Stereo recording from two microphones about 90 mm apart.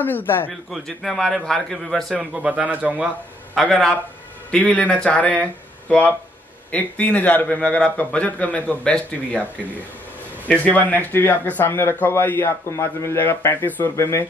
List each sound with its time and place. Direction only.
0.0 s speech: 20° left (ahead or behind)
0.5 s a man's voice: 5° left (ahead or behind)
2.1 s speech: 15° right (ahead or behind)
3.5 s a man's voice: 5° left (ahead or behind)
10.9 s speech: 20° left (ahead or behind)